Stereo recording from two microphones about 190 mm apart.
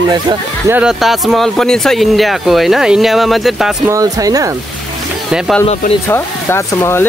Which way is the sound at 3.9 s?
20° right (ahead or behind).